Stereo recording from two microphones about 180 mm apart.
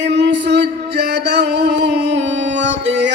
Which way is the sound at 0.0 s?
75° right (ahead or behind).